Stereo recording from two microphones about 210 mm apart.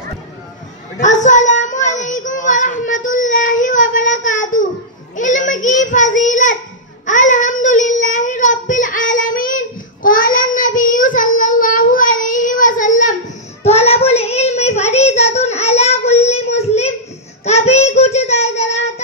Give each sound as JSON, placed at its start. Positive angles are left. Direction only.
{"t": 0.9, "sound": "child singing", "side_deg": 35}